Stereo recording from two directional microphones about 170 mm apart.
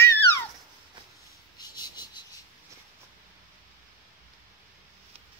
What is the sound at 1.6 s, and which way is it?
Cricket, 25° left (ahead or behind).